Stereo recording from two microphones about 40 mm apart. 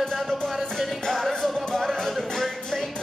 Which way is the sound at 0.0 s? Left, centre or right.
Centre.